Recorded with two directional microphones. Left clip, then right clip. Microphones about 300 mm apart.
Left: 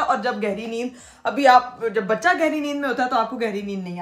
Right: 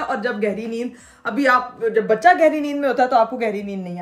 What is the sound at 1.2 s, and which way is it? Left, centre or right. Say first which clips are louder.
Speech: left 2 dB; left.